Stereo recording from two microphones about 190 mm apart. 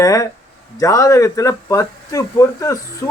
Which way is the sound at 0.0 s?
15° left (ahead or behind).